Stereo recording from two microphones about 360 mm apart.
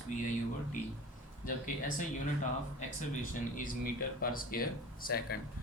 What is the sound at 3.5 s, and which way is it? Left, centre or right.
Speech, left.